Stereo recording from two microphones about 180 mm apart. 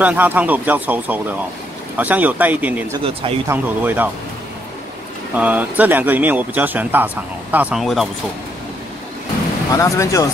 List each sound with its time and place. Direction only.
0.0 s speech: 10° right (ahead or behind)
3.0 s speech: 30° right (ahead or behind)
3.4 s speech: 10° right (ahead or behind)
5.3 s speech: 10° right (ahead or behind)
9.7 s speech: 20° left (ahead or behind)